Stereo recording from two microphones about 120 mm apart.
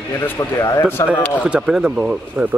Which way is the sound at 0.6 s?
25° left (ahead or behind).